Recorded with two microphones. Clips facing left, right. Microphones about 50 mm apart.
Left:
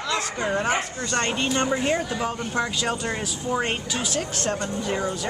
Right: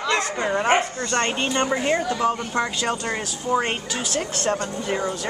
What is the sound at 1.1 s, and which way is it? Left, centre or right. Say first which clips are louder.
Speech: right 2 dB; right.